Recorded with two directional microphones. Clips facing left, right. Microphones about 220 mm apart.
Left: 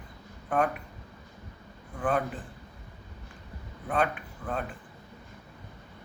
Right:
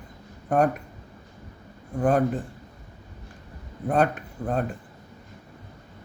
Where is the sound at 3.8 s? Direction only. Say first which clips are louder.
Right 6 dB; 45° right (ahead or behind).